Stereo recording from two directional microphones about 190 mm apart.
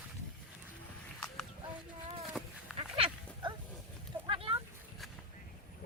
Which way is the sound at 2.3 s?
Centre (ahead or behind).